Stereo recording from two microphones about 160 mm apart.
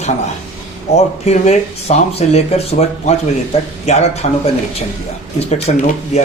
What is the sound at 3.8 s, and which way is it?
Speech, 40° left (ahead or behind).